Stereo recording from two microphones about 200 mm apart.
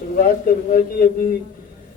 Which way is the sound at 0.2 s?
45° left (ahead or behind).